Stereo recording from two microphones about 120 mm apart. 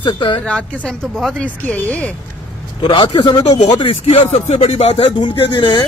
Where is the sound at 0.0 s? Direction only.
45° left (ahead or behind).